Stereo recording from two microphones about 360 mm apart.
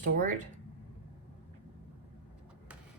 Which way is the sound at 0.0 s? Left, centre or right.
Right.